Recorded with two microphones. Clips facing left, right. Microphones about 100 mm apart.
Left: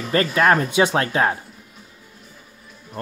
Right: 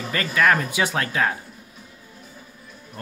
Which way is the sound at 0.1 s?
35° left (ahead or behind).